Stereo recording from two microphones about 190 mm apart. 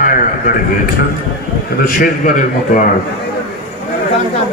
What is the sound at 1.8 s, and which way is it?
A man's voice, 45° left (ahead or behind).